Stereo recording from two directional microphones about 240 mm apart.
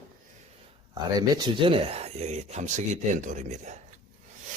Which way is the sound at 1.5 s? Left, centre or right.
Right.